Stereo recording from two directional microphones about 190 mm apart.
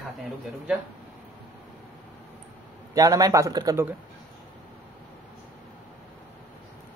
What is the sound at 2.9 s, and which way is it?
A man's voice, 20° right (ahead or behind).